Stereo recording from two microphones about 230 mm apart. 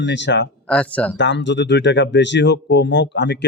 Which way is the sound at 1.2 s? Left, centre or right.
Left.